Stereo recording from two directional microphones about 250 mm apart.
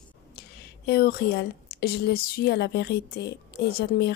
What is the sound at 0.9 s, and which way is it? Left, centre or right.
Speech, left.